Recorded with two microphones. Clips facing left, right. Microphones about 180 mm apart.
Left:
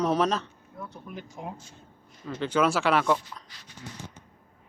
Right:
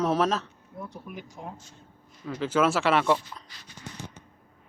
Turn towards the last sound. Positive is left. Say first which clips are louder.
# right 1 dB
turn(degrees=0)  # may be behind; listen again after turning